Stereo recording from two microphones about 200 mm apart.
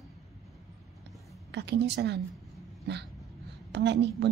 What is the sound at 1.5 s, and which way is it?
Speech, 60° right (ahead or behind).